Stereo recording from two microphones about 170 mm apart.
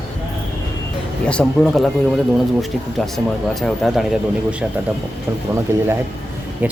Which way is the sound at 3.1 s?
Centre (ahead or behind).